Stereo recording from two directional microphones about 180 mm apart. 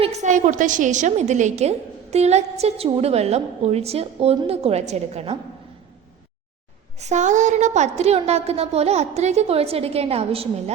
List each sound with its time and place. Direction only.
0.0 s a woman's voice: 40° right (ahead or behind)
7.0 s a woman's voice: 40° right (ahead or behind)